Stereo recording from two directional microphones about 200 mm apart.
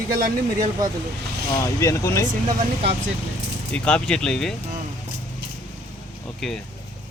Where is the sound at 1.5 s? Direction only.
15° left (ahead or behind).